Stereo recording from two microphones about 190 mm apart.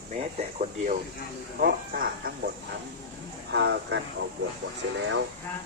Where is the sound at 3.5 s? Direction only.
65° right (ahead or behind).